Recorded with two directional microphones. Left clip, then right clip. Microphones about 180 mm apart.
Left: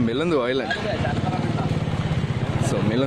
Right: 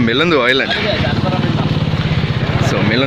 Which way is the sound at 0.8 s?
35° right (ahead or behind).